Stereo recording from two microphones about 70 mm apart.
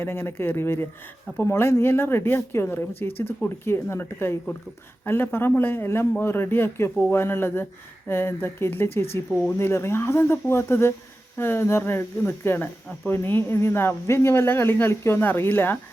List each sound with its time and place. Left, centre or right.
0.0 s a man's voice: left